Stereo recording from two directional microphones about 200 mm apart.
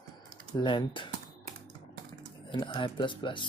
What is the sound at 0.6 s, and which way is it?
Speech, 25° left (ahead or behind).